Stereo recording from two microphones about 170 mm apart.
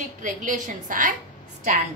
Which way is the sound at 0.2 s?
50° right (ahead or behind).